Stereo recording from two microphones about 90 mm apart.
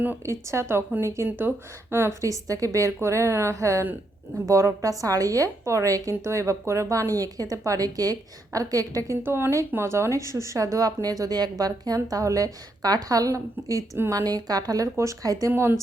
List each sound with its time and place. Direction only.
0.3 s a woman's voice: 30° right (ahead or behind)
2.2 s a woman's voice: 40° right (ahead or behind)
9.2 s a woman's voice: 25° right (ahead or behind)
14.4 s a woman's voice: 45° right (ahead or behind); by 15.8 s 30° right (ahead or behind)